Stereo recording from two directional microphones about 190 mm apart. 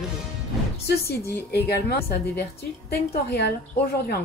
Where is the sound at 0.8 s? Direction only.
60° left (ahead or behind).